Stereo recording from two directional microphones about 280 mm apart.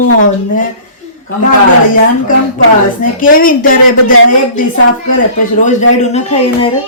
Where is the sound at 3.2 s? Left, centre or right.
Left.